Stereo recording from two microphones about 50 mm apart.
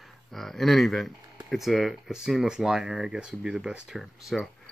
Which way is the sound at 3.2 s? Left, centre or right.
Right.